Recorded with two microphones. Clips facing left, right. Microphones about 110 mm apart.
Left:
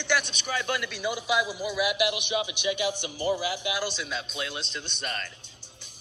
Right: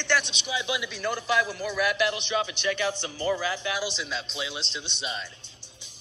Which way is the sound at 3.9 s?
5° left (ahead or behind).